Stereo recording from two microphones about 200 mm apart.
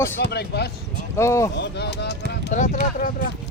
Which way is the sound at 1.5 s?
55° left (ahead or behind).